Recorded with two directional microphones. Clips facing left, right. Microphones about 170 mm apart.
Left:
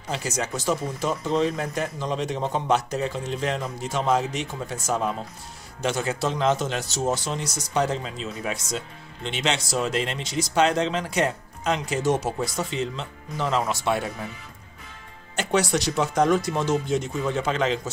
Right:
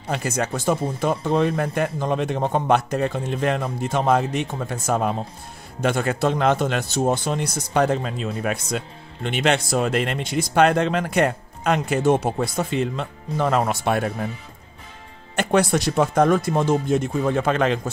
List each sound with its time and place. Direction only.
0.1 s speech: 55° right (ahead or behind)
15.3 s speech: 55° right (ahead or behind)